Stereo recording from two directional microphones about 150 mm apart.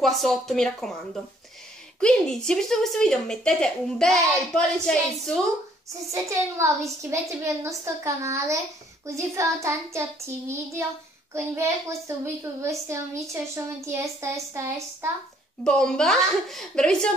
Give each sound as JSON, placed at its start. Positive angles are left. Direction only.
{"t": 0.0, "sound": "speech", "side_deg": 0}
{"t": 2.0, "sound": "speech", "side_deg": 5}
{"t": 6.6, "sound": "a child's voice", "side_deg": -20}
{"t": 15.6, "sound": "speech", "side_deg": 5}